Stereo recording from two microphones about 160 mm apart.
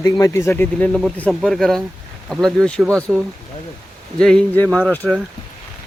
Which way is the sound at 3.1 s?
5° right (ahead or behind).